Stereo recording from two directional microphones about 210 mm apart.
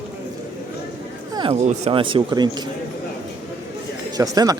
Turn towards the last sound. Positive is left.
turn(degrees=-15)  # may be behind; listen again after turning